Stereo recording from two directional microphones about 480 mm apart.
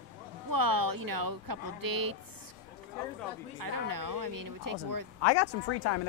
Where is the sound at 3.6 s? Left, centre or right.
Right.